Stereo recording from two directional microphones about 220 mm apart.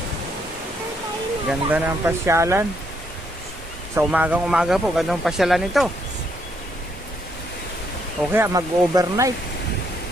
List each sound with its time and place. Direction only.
1.5 s speech: 10° right (ahead or behind)
3.9 s speech: 5° right (ahead or behind)
8.3 s speech: 15° right (ahead or behind)